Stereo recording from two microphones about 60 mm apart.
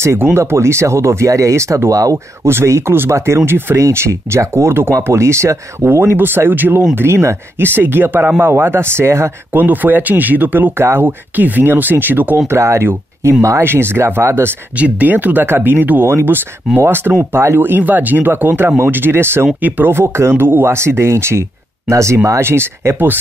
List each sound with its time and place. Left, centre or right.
0.2 s speech: right
1.9 s speech: right
2.4 s speech: right
7.0 s speech: right
9.6 s speech: right
12.4 s speech: right
14.8 s speech: right